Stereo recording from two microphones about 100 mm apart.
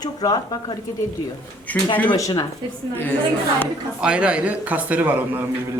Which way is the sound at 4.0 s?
10° right (ahead or behind).